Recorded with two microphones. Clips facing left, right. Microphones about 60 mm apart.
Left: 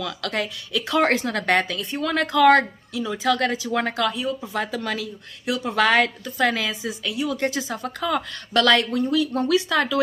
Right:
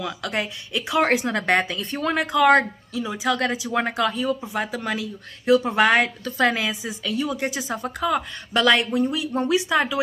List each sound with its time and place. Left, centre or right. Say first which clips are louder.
0.0 s speech: even; right
0.8 s speech: even; centre
1.2 s speech: even; right
1.8 s speech: right 1 dB; right
2.1 s speech: left 1 dB; centre
4.1 s speech: right 2 dB; right
4.4 s speech: even; centre
5.4 s speech: right 4 dB; right
6.2 s speech: right 1 dB; right
6.5 s speech: even; centre
7.6 s speech: right 1 dB; right
8.0 s speech: right 1 dB; centre